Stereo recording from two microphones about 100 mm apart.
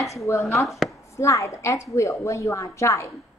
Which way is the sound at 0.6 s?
Centre (ahead or behind).